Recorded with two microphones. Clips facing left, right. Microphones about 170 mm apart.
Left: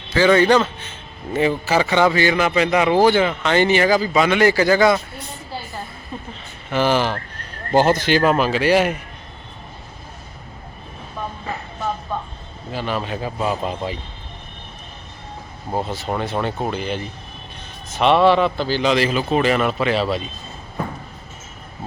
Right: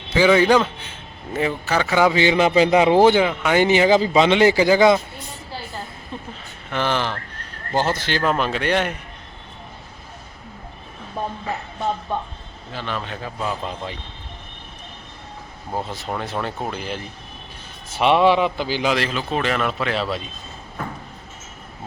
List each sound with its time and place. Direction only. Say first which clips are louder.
0.1 s speech: left 1 dB; 10° right (ahead or behind)
1.3 s speech: left 4 dB; centre (ahead or behind)
2.0 s a man's voice: right 3 dB; 15° right (ahead or behind)
3.2 s speech: even; 10° right (ahead or behind)
6.7 s speech: left 4 dB; 5° left (ahead or behind)
11.2 s vehicle: right 2 dB; 40° right (ahead or behind)
12.7 s speech: left 5 dB; 10° left (ahead or behind)
15.8 s speech: left 4 dB; centre (ahead or behind)
17.9 s speech: left 1 dB; 10° right (ahead or behind)
18.9 s speech: left 5 dB; 5° left (ahead or behind)